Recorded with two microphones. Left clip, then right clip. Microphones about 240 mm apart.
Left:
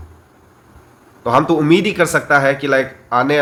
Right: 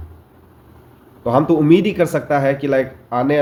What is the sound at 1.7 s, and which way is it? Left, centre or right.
A man's voice, centre.